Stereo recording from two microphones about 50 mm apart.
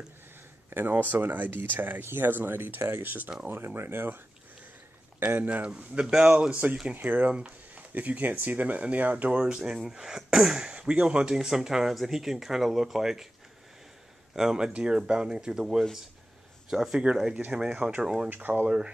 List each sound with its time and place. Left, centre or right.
0.7 s speech: right
5.2 s speech: right; by 6.5 s centre
7.0 s speech: right; by 13.3 s centre
14.3 s speech: centre
18.3 s speech: right